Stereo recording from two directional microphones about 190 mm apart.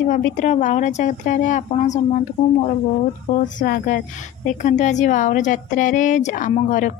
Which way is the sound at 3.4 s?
45° left (ahead or behind).